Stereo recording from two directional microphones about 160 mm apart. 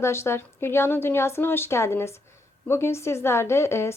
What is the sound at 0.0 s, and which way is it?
A woman's voice, 15° left (ahead or behind).